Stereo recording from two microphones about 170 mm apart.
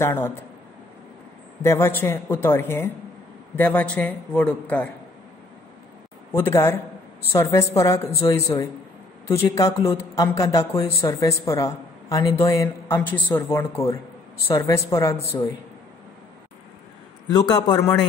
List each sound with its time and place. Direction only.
0.0 s a man's voice: 15° left (ahead or behind)
1.6 s a man's voice: 15° left (ahead or behind)
6.3 s a man's voice: 15° left (ahead or behind)
17.3 s speech: 25° left (ahead or behind)